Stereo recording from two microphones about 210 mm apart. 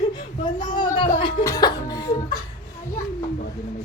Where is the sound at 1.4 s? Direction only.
20° left (ahead or behind).